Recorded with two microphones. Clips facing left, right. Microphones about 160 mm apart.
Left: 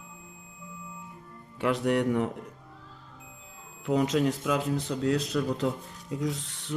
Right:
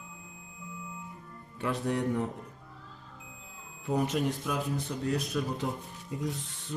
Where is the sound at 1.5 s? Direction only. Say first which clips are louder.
Left 5 dB; 80° left.